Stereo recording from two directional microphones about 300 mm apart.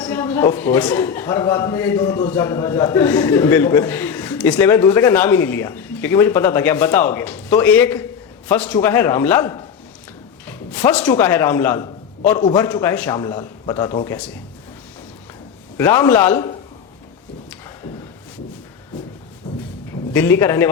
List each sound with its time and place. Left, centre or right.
0.0 s a man's voice: centre
15.8 s a man's voice: centre
20.1 s a man's voice: centre